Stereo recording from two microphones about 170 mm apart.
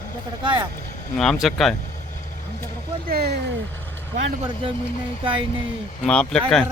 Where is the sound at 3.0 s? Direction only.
65° right (ahead or behind).